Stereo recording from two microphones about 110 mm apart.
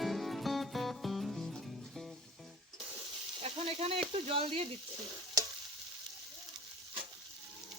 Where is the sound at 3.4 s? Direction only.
70° right (ahead or behind).